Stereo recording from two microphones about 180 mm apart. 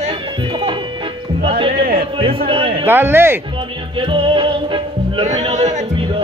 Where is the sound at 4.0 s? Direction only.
30° right (ahead or behind).